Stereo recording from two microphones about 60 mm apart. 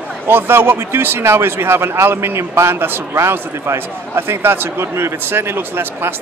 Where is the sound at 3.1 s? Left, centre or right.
Right.